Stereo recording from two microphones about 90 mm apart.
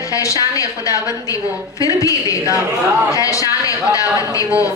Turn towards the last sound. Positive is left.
turn(degrees=40)  # may be behind; listen again after turning